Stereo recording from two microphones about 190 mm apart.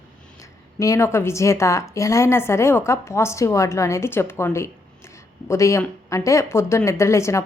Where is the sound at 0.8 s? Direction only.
15° left (ahead or behind).